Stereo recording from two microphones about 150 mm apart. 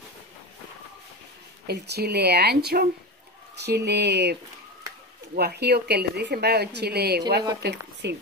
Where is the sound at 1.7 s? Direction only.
90° right.